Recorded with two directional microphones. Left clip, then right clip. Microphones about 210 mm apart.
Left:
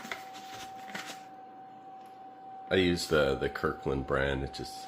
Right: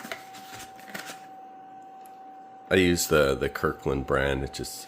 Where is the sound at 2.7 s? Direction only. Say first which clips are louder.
Right 5 dB; 50° right (ahead or behind).